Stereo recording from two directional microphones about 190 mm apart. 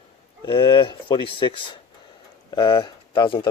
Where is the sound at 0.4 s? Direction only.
25° left (ahead or behind).